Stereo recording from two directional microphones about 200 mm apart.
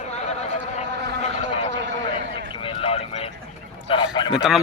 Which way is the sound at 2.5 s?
25° left (ahead or behind).